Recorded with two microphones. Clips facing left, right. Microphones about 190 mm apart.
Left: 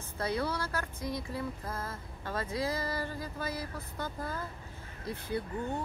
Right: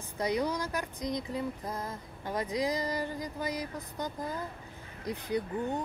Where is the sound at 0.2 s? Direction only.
15° right (ahead or behind).